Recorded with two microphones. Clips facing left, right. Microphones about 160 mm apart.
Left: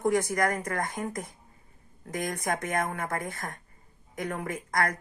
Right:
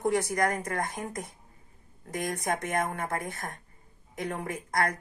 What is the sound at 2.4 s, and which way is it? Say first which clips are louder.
Speech: even; 25° right (ahead or behind).